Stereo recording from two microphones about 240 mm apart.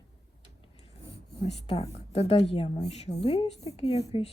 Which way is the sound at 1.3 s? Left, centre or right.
Left.